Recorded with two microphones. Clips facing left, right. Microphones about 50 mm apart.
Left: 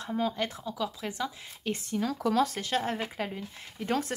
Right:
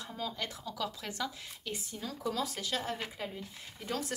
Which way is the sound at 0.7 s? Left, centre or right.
Left.